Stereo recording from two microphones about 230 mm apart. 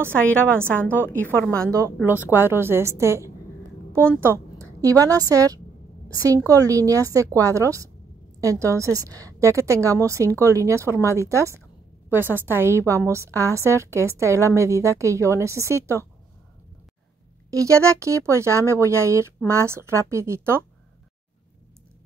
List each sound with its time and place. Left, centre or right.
0.2 s a woman's voice: centre
0.8 s a woman's voice: centre
1.1 s speech: centre
1.6 s a woman's voice: centre
17.5 s a woman's voice: centre